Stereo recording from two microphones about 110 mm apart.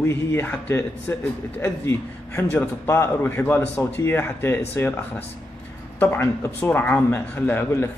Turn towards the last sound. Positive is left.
turn(degrees=20)  # may be behind; listen again after turning